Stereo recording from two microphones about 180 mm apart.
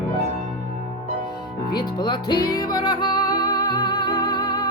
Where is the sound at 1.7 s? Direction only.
25° left (ahead or behind).